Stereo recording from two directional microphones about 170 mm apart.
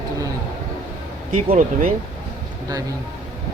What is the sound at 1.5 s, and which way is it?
Speech, 55° right (ahead or behind).